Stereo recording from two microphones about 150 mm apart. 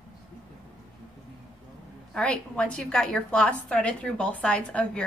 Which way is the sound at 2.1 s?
5° left (ahead or behind).